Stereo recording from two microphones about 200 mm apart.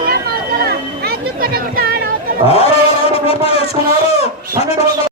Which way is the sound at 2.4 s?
30° left (ahead or behind).